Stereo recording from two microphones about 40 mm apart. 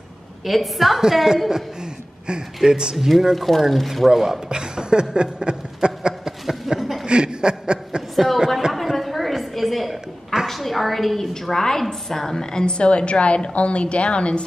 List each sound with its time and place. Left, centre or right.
0.5 s a woman's voice: centre
3.1 s speech: centre
6.8 s chuckle: centre
7.1 s chuckle: right
8.7 s a sound: centre
10.4 s a woman's voice: centre; by 14.4 s left